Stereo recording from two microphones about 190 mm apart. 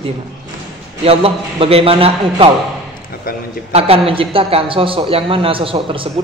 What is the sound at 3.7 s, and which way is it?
A woman's voice, 30° right (ahead or behind).